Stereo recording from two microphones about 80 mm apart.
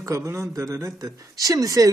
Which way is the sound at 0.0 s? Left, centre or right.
Right.